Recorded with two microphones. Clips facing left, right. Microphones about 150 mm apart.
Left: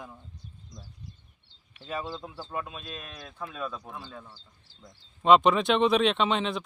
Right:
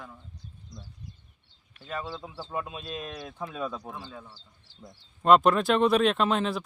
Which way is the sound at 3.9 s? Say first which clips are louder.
Right 1 dB; centre (ahead or behind).